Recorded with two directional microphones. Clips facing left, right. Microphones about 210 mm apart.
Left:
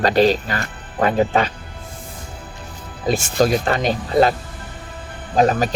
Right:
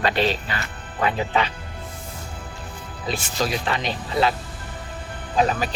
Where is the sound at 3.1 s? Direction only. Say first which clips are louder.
Left 8 dB; 45° left (ahead or behind).